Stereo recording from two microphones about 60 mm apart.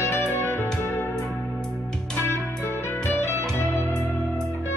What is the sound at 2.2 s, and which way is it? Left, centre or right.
Music, left.